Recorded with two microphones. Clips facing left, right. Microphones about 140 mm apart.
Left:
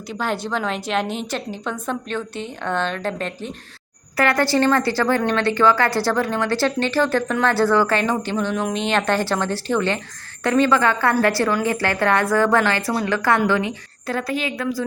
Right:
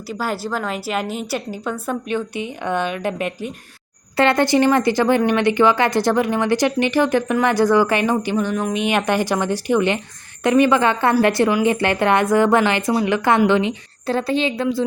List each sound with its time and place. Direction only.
0.1 s a woman's voice: 5° right (ahead or behind); by 14.8 s 25° right (ahead or behind)